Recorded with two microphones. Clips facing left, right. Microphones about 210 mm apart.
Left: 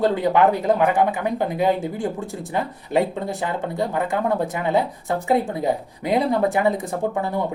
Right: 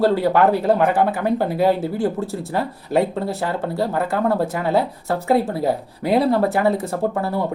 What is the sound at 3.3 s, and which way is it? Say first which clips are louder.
Speech: right 2 dB; 15° left (ahead or behind).